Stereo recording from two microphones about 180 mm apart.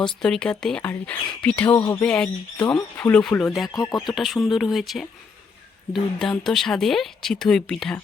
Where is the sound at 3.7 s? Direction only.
20° left (ahead or behind).